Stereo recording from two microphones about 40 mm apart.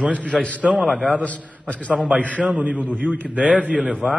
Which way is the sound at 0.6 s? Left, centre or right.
Right.